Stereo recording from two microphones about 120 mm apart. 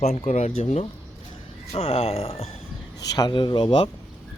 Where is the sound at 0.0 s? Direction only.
65° left (ahead or behind).